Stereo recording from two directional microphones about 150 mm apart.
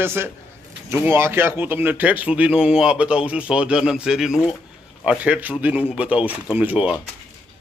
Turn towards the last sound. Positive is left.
turn(degrees=-10)  # may be behind; listen again after turning